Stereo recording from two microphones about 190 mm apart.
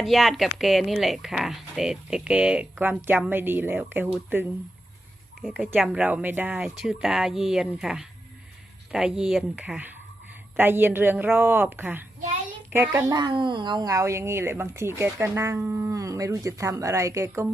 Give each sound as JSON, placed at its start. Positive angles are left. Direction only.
{"t": 0.0, "sound": "speech", "side_deg": 0}
{"t": 5.4, "sound": "speech", "side_deg": 0}